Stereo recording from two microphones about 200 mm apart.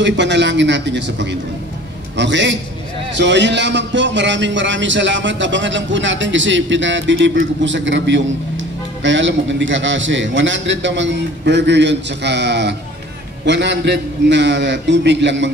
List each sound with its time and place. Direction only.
0.0 s a man's voice: 65° right (ahead or behind)